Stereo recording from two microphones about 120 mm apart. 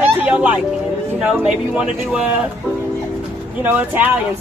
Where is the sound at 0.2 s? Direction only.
10° right (ahead or behind).